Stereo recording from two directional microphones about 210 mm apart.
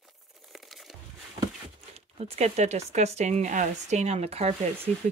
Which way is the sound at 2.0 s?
30° right (ahead or behind).